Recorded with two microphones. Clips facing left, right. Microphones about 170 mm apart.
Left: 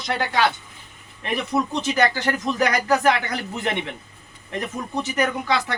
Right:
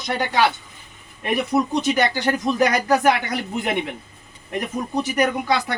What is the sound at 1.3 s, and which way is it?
Speech, 10° right (ahead or behind).